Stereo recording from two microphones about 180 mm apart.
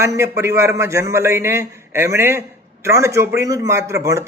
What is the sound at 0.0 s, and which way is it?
A man's voice, 15° right (ahead or behind).